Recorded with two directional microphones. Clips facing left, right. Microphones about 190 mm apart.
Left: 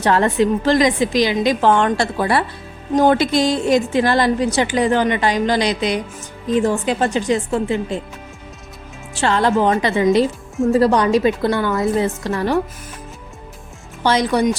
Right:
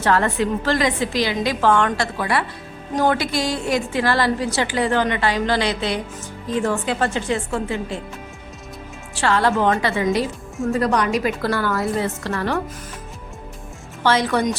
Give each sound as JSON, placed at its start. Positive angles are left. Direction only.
{"t": 0.0, "sound": "a woman's voice", "side_deg": 20}
{"t": 9.2, "sound": "a woman's voice", "side_deg": 20}
{"t": 10.7, "sound": "a woman's voice", "side_deg": 30}
{"t": 14.0, "sound": "speech", "side_deg": 15}